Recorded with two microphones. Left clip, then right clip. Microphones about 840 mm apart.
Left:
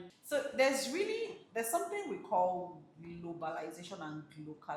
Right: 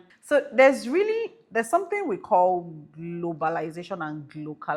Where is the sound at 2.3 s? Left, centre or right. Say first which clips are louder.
Right 12 dB; right.